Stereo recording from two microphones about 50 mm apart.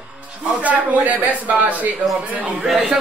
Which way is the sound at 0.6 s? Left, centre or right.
Right.